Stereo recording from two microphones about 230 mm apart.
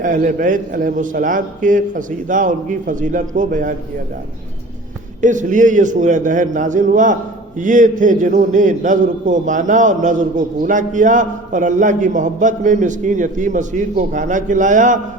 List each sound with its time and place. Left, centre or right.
0.0 s a man's voice: right
5.2 s a man's voice: right